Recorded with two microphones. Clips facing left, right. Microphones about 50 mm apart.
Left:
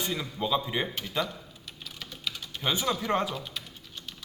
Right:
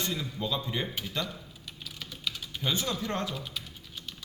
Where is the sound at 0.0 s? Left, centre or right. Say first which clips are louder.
Left 2 dB; left.